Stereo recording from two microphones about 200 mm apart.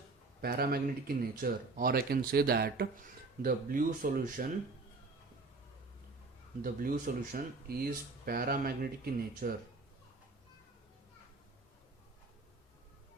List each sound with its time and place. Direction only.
0.4 s speech: 50° right (ahead or behind)
6.6 s speech: 45° right (ahead or behind)